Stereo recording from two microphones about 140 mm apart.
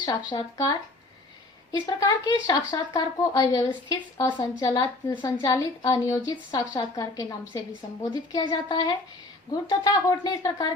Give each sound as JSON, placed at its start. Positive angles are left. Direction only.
{"t": 0.0, "sound": "speech", "side_deg": 30}